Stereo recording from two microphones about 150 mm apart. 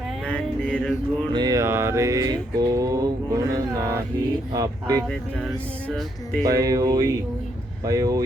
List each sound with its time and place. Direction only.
0.3 s music: 5° left (ahead or behind)
1.3 s mantra: 25° right (ahead or behind)
6.4 s mantra: 25° right (ahead or behind)